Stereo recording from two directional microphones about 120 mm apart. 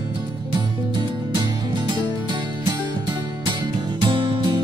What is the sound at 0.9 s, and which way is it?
Music, 40° right (ahead or behind).